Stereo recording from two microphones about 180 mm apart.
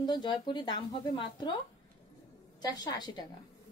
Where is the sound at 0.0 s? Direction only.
25° left (ahead or behind).